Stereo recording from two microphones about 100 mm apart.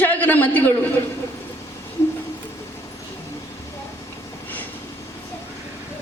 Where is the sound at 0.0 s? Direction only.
20° left (ahead or behind).